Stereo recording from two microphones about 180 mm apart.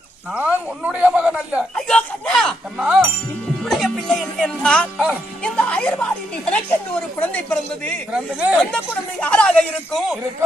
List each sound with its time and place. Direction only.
0.3 s speech: 10° right (ahead or behind)
1.7 s speech: 5° left (ahead or behind)
2.8 s speech: 10° right (ahead or behind); by 7.6 s 10° left (ahead or behind)
8.1 s speech: 5° right (ahead or behind)
8.7 s speech: 5° left (ahead or behind)